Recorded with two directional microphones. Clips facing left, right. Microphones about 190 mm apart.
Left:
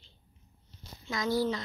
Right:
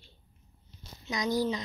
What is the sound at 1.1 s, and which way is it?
Speech, 15° right (ahead or behind).